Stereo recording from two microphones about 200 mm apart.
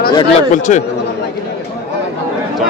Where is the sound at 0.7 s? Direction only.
40° left (ahead or behind).